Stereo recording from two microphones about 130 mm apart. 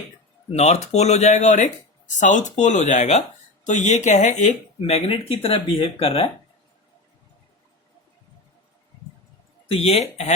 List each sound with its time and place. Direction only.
0.5 s speech: 55° left (ahead or behind)
4.8 s speech: 50° left (ahead or behind)
9.6 s speech: 50° left (ahead or behind)